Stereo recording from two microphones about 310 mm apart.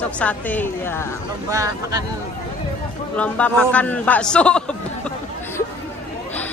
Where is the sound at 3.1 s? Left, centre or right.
Centre.